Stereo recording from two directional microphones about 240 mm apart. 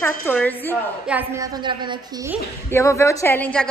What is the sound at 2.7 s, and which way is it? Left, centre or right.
Speech, centre.